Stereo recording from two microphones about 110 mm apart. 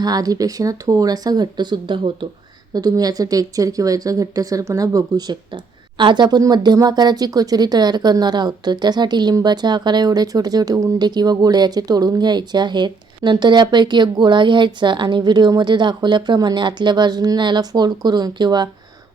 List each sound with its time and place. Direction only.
0.0 s speech: 35° right (ahead or behind)